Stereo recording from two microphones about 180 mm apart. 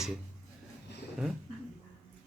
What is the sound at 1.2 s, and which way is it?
Speech, 5° right (ahead or behind).